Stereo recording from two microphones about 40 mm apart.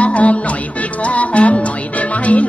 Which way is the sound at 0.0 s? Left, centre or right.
Left.